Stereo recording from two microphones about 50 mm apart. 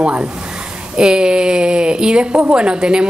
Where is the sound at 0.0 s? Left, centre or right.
Centre.